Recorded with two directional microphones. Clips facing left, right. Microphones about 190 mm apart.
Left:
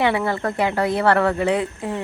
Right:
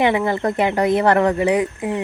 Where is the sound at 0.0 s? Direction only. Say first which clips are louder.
Right 3 dB; 20° right (ahead or behind).